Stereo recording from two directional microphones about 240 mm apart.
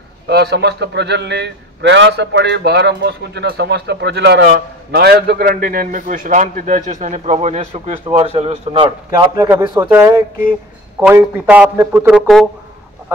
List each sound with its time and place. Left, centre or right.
0.3 s a man's voice: right; by 12.4 s centre